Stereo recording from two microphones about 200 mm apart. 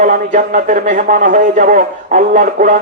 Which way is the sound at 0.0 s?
40° right (ahead or behind).